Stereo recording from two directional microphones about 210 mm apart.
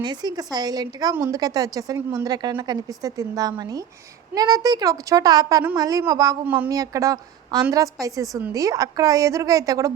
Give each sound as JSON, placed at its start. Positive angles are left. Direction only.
{"t": 0.0, "sound": "a woman's voice", "side_deg": -20}